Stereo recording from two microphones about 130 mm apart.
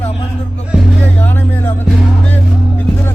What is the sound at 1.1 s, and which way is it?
Speech, 15° left (ahead or behind).